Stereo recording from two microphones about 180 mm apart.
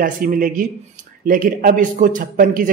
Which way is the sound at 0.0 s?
50° right (ahead or behind).